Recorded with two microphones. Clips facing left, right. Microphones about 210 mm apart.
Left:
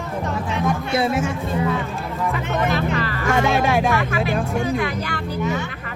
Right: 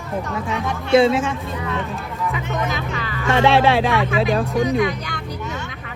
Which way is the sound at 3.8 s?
90° right.